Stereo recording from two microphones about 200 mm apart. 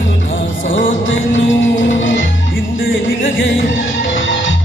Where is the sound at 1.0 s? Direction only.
70° left (ahead or behind).